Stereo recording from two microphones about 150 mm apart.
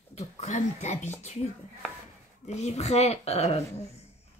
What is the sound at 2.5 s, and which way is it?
Speech, 45° left (ahead or behind).